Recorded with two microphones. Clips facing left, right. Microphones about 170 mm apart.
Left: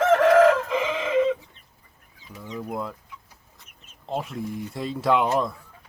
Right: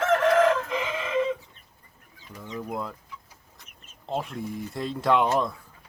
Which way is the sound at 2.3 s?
5° left (ahead or behind).